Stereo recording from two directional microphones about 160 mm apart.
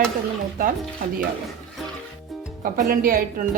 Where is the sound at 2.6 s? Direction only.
65° right (ahead or behind).